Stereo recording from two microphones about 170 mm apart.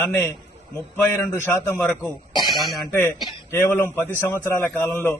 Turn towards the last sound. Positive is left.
turn(degrees=10)  # may be behind; listen again after turning